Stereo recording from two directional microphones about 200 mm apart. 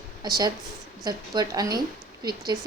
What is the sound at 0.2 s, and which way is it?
A woman's voice, 20° right (ahead or behind).